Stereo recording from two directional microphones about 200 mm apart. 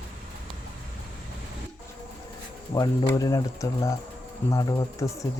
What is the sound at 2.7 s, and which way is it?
Speech, 20° left (ahead or behind).